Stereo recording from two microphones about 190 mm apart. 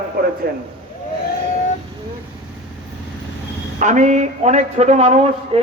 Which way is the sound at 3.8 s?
40° right (ahead or behind).